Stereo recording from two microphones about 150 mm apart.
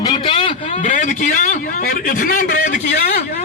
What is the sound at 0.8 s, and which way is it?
A man's voice, 60° left (ahead or behind).